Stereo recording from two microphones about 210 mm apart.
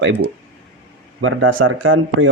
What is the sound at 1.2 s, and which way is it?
Speech, 75° right (ahead or behind).